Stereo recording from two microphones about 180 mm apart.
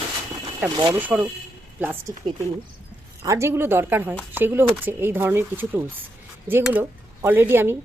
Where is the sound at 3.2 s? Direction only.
15° right (ahead or behind).